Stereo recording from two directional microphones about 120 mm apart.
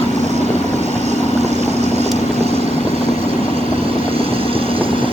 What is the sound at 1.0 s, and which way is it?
Vehicle, 70° right (ahead or behind).